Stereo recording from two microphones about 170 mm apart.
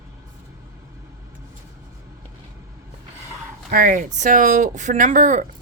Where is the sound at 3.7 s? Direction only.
55° right (ahead or behind).